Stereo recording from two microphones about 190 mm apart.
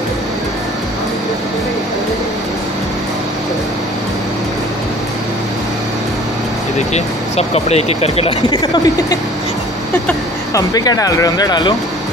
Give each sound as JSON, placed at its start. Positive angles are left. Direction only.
{"t": 6.9, "sound": "speech", "side_deg": 35}